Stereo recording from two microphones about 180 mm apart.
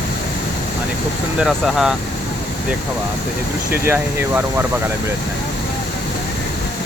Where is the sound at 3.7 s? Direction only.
10° right (ahead or behind).